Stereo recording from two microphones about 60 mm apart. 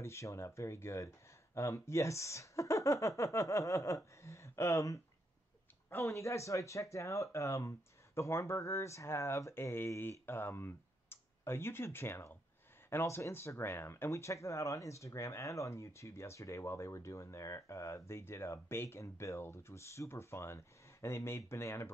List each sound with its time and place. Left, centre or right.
0.0 s speech: left
5.9 s speech: left